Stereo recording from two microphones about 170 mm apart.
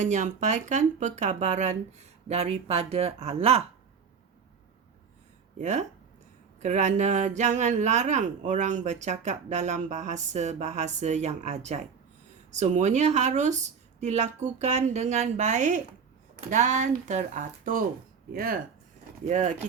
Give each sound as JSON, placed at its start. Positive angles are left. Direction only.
{"t": 0.0, "sound": "speech", "side_deg": -45}
{"t": 5.5, "sound": "speech", "side_deg": -45}
{"t": 19.2, "sound": "speech", "side_deg": -45}